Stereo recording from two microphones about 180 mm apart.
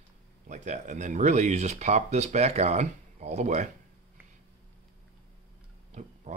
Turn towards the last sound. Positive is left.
turn(degrees=-40)  # may be behind; listen again after turning